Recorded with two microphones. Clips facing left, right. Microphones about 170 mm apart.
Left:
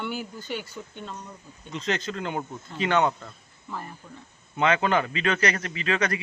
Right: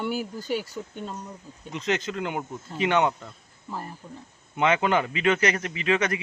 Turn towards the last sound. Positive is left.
turn(degrees=-20)  # may be behind; listen again after turning